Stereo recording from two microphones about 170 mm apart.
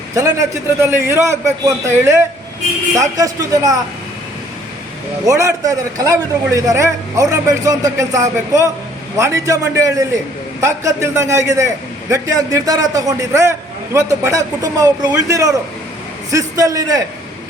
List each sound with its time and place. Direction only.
0.1 s a man's voice: 20° right (ahead or behind)
5.3 s a man's voice: 20° right (ahead or behind)